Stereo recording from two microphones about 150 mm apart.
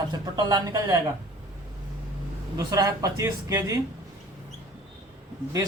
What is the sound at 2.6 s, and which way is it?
A man's voice, 25° right (ahead or behind).